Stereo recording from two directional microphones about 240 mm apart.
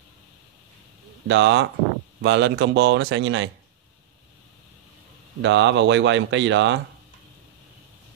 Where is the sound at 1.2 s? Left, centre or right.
Right.